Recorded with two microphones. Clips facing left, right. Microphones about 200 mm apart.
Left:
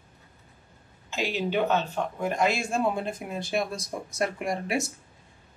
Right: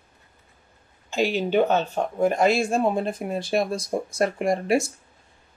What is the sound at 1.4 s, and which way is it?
Speech, 45° right (ahead or behind).